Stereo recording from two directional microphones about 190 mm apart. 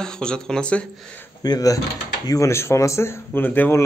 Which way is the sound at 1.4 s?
20° left (ahead or behind).